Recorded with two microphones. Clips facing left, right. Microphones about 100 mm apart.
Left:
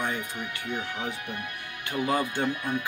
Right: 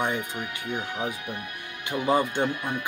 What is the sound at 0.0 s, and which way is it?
Speech, 20° right (ahead or behind).